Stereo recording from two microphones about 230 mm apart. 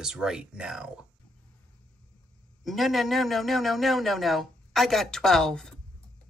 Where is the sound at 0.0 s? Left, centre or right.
Centre.